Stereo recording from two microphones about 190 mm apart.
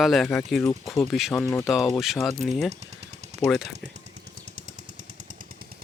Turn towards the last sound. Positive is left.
turn(degrees=0)  # may be behind; listen again after turning